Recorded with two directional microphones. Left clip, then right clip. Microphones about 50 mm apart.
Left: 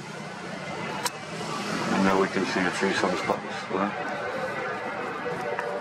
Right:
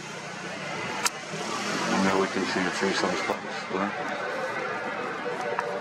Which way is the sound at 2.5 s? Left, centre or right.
Centre.